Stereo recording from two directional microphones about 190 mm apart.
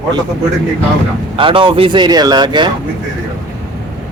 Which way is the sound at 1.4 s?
25° right (ahead or behind).